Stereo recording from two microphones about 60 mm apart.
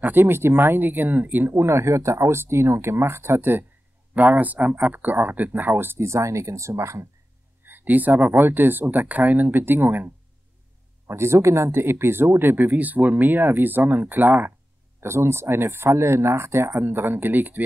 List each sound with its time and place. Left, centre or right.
0.0 s speech: right
4.1 s speech: right
5.9 s speech: right
7.6 s speech: right
11.1 s speech: right
15.0 s speech: right